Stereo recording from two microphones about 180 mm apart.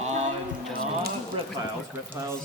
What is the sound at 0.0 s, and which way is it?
Music, 40° right (ahead or behind).